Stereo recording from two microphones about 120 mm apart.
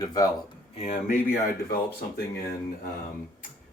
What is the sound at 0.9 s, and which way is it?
Speech, 90° left.